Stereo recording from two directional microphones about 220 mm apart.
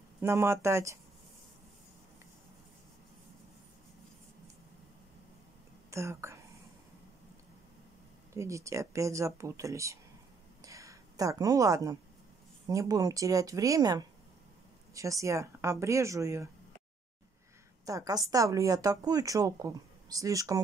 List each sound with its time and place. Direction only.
0.2 s speech: 10° right (ahead or behind)
5.9 s speech: 15° right (ahead or behind)
8.4 s speech: 15° right (ahead or behind)
10.6 s a sound: 15° right (ahead or behind)
12.6 s speech: 15° right (ahead or behind)
17.8 s speech: 15° right (ahead or behind)